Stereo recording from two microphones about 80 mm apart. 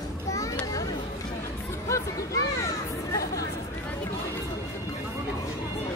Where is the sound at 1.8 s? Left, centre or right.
Left.